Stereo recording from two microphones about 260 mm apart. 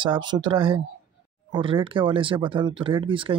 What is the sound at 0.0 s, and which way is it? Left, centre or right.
Speech, centre.